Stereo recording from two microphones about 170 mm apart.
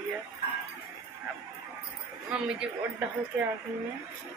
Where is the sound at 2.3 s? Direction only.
5° right (ahead or behind).